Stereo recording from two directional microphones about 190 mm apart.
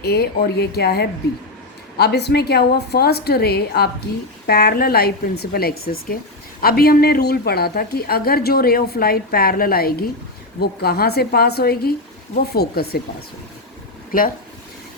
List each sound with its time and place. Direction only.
0.0 s a woman's voice: 55° left (ahead or behind)